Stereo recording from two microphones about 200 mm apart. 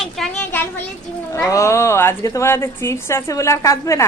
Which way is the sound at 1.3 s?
15° left (ahead or behind).